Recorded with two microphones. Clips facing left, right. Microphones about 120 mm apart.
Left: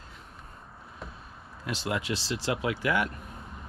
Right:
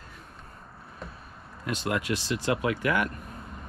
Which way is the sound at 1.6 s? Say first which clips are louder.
Right 2 dB; 50° right (ahead or behind).